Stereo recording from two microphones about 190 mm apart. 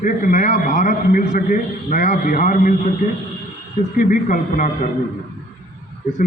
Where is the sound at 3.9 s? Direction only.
45° left (ahead or behind).